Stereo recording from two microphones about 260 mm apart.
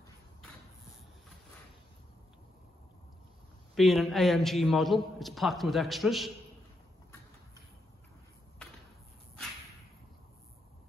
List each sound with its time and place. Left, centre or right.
3.7 s a man's voice: centre